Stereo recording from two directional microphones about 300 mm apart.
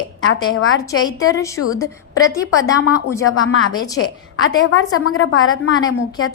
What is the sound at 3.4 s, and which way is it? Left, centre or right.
Speech, left.